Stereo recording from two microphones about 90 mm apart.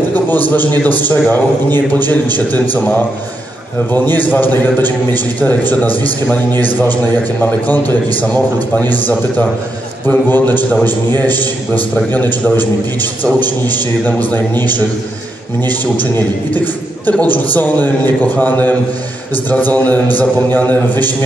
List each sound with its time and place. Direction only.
0.1 s a man's voice: 20° left (ahead or behind)
7.6 s a man's voice: 20° left (ahead or behind)
15.6 s a man's voice: 20° left (ahead or behind)